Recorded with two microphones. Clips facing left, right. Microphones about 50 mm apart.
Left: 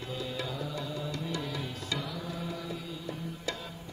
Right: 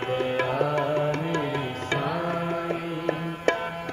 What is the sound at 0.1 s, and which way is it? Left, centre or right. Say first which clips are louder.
Music: right 11 dB; right.